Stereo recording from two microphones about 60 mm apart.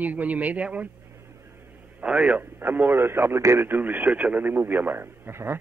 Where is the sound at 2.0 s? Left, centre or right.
Centre.